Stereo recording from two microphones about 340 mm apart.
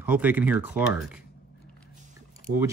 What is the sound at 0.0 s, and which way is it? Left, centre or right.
Speech, centre.